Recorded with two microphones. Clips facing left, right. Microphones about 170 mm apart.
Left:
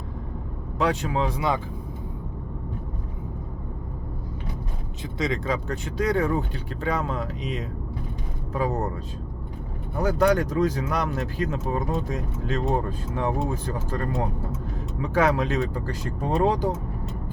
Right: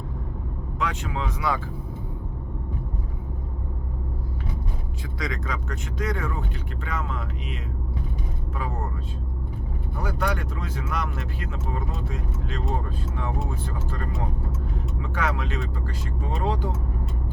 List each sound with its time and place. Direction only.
0.8 s speech: 35° left (ahead or behind)
1.4 s speech: 20° left (ahead or behind)
5.1 s speech: 25° left (ahead or behind)
10.0 s speech: 40° left (ahead or behind)
13.1 s speech: 40° left (ahead or behind)
15.0 s speech: 40° left (ahead or behind)